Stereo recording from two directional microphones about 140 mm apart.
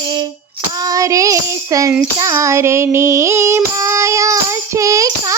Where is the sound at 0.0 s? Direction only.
30° right (ahead or behind).